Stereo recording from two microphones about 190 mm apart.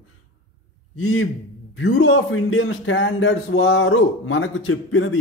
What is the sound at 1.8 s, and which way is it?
A man's voice, 90° left.